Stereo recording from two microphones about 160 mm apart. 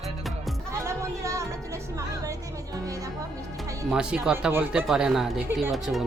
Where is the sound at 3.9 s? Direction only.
5° right (ahead or behind).